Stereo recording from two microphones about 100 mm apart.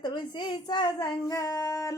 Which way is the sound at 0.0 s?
45° left (ahead or behind).